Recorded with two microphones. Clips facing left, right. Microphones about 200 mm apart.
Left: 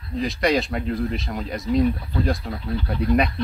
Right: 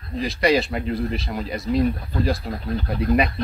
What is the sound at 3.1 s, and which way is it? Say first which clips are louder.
Speech: even; centre (ahead or behind).